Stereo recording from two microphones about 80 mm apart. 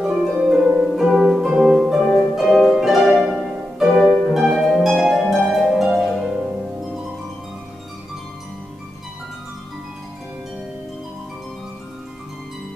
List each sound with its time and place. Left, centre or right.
0.0 s music: centre
3.3 s harp: centre